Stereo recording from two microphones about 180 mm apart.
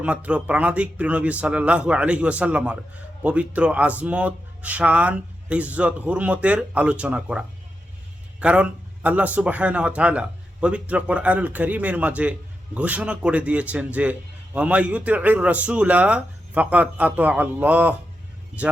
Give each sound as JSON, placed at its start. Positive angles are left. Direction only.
{"t": 0.0, "sound": "a man's voice", "side_deg": -5}